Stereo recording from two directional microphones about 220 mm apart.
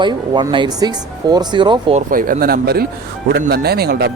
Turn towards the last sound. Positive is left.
turn(degrees=-45)  # may be behind; listen again after turning